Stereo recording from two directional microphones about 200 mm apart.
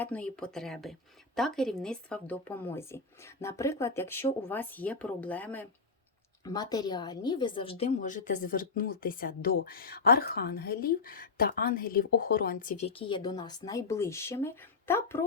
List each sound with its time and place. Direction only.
0.0 s a woman's voice: 5° left (ahead or behind)
6.4 s a woman's voice: 20° left (ahead or behind)